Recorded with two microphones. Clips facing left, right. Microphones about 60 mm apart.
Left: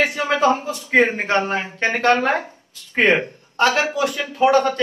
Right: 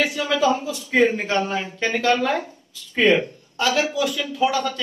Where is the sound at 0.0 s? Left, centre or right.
Left.